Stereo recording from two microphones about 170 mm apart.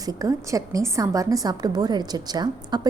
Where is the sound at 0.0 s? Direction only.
20° right (ahead or behind).